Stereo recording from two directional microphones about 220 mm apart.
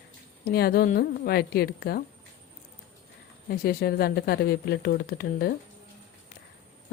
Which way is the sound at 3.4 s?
45° left (ahead or behind).